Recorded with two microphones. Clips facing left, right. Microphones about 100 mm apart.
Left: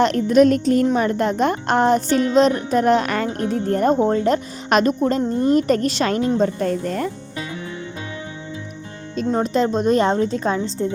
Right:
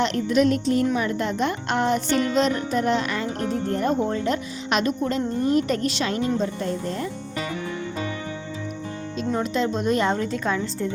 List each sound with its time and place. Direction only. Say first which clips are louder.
0.0 s speech: left 6 dB; 45° left (ahead or behind)
9.3 s a woman's voice: left 5 dB; 40° left (ahead or behind)